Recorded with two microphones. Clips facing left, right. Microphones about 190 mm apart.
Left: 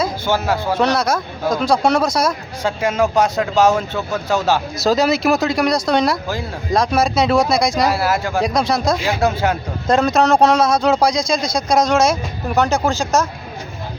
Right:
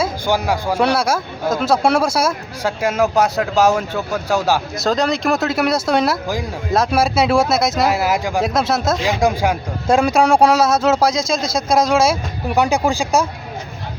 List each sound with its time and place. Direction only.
0.0 s speech: 15° right (ahead or behind)
4.8 s speech: 5° left (ahead or behind)
7.9 s speech: 15° right (ahead or behind)
8.4 s speech: centre (ahead or behind)